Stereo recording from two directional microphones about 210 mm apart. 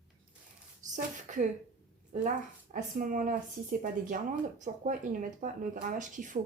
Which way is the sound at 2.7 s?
40° right (ahead or behind).